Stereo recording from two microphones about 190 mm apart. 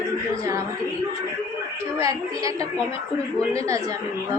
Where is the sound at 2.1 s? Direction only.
15° right (ahead or behind).